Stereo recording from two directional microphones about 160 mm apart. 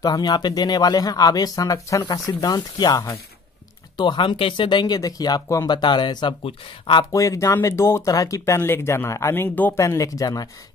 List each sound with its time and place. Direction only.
0.0 s speech: 25° left (ahead or behind)
7.2 s speech: 20° left (ahead or behind)